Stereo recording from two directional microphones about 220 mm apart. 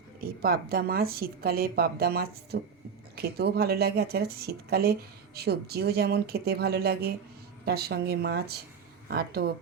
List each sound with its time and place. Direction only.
0.2 s speech: 45° right (ahead or behind)